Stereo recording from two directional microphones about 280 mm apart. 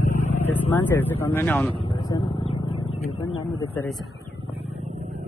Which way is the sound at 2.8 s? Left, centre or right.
Left.